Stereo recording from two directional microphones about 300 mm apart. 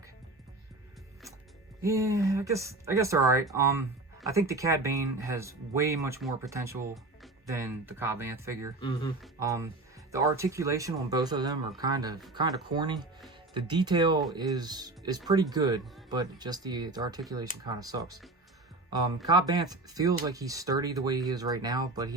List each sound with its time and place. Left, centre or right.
1.8 s speech: centre
8.8 s speech: centre
9.2 s speech: centre